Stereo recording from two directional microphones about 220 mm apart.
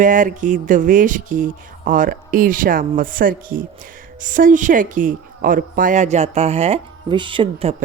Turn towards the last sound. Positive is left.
turn(degrees=-30)  # may be behind; listen again after turning